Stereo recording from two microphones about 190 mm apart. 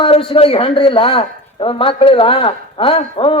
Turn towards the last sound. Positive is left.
turn(degrees=30)  # may be behind; listen again after turning